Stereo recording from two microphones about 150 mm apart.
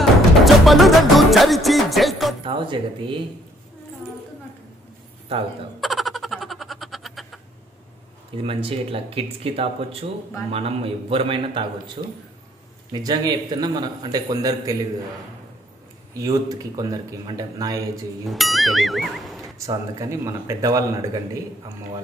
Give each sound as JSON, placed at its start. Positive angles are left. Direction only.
{"t": 0.0, "sound": "music", "side_deg": 0}
{"t": 2.4, "sound": "speech", "side_deg": -35}
{"t": 5.8, "sound": "a sound", "side_deg": 0}
{"t": 8.4, "sound": "a man's voice", "side_deg": -40}
{"t": 16.1, "sound": "a man's voice", "side_deg": -25}
{"t": 18.2, "sound": "speech", "side_deg": 0}
{"t": 19.6, "sound": "a man's voice", "side_deg": -20}